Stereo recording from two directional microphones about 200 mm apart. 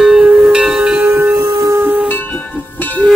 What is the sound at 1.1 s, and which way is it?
Music, 15° right (ahead or behind).